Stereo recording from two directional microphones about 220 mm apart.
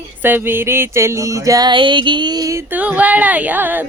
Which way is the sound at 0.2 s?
10° right (ahead or behind).